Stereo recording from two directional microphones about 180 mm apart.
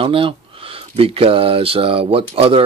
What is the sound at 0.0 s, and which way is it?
Speech, 30° right (ahead or behind).